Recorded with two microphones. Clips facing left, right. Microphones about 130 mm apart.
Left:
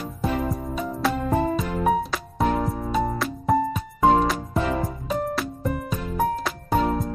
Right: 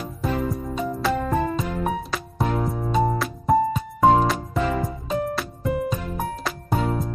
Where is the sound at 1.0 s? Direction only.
Centre (ahead or behind).